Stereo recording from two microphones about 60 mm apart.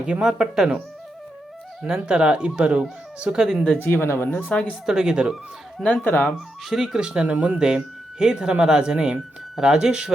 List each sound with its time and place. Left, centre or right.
0.0 s speech: centre
1.8 s speech: centre
3.8 s speech: left
4.4 s speech: centre
4.9 s speech: centre
6.0 s speech: left
6.2 s speech: centre
6.8 s speech: centre
7.3 s speech: right
8.2 s speech: centre